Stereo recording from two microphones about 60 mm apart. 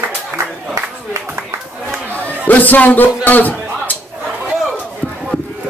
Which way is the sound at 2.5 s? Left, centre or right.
Left.